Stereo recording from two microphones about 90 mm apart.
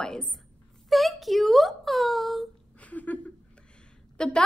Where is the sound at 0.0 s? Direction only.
10° left (ahead or behind).